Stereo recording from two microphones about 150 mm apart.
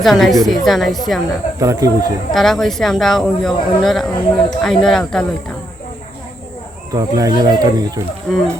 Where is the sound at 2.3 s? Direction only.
Centre (ahead or behind).